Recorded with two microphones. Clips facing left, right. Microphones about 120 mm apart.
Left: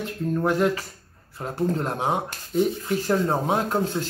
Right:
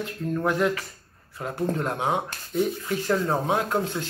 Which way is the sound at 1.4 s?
35° left (ahead or behind).